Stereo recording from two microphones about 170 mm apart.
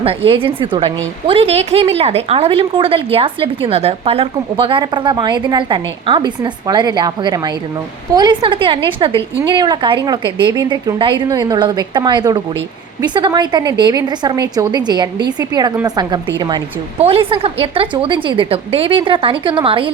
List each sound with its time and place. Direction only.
0.0 s a woman's voice: 35° right (ahead or behind)